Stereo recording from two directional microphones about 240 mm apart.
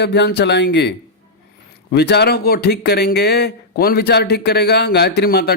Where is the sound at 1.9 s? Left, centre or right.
Left.